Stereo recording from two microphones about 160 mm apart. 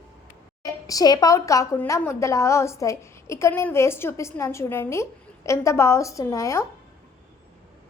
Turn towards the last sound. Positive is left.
turn(degrees=20)  # may be behind; listen again after turning